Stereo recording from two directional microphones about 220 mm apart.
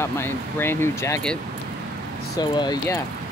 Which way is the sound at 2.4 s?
20° left (ahead or behind).